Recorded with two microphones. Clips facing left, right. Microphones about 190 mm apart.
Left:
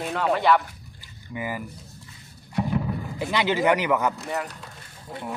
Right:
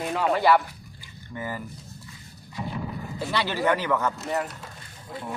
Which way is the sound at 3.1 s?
15° left (ahead or behind).